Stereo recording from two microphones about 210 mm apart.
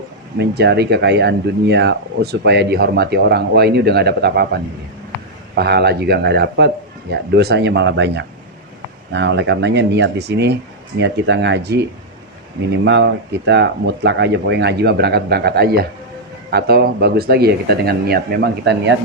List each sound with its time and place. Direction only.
0.3 s speech: 50° right (ahead or behind)
5.5 s speech: 50° right (ahead or behind)